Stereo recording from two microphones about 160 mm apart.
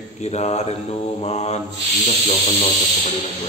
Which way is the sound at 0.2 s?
45° left (ahead or behind).